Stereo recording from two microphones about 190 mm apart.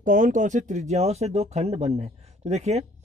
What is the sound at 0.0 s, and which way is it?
Speech, 45° right (ahead or behind).